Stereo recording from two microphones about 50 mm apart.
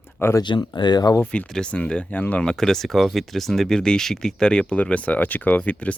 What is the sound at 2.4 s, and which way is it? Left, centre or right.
Speech, centre.